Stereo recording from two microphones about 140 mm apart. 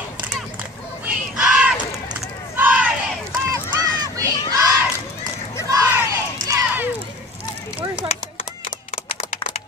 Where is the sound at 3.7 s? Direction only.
30° right (ahead or behind).